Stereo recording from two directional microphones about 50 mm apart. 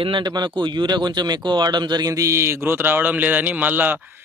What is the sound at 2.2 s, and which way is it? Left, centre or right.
Speech, right.